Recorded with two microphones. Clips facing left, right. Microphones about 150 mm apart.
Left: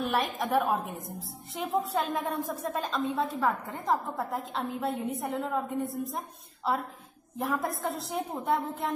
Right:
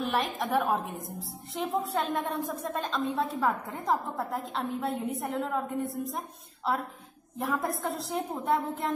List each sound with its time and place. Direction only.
0.0 s a woman's voice: centre (ahead or behind)